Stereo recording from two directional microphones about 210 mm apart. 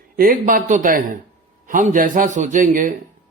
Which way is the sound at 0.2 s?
45° right (ahead or behind).